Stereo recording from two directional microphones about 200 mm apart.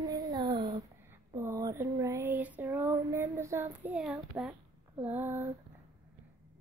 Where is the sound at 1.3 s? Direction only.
15° right (ahead or behind).